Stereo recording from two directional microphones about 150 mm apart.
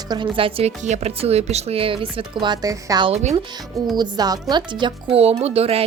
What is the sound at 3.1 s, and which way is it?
Speech, 45° right (ahead or behind).